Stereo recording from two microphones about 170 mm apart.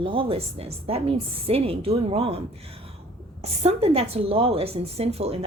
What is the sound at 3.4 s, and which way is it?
A woman's voice, 40° right (ahead or behind).